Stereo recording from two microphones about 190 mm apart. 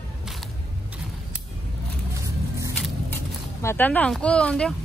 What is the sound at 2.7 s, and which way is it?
Vehicle, 5° left (ahead or behind).